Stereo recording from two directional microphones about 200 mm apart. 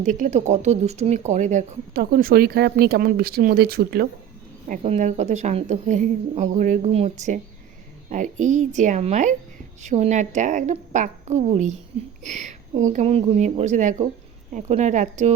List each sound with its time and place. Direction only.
0.0 s speech: 40° right (ahead or behind)
4.7 s a woman's voice: 35° right (ahead or behind)